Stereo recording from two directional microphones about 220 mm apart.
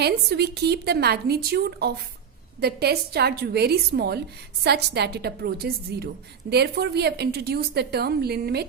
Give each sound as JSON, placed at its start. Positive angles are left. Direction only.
{"t": 0.0, "sound": "a woman's voice", "side_deg": -45}